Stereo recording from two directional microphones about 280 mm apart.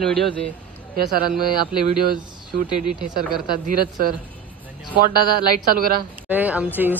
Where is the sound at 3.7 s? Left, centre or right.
Right.